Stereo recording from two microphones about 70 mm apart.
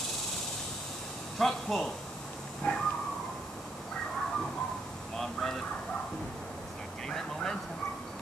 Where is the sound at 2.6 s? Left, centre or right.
Left.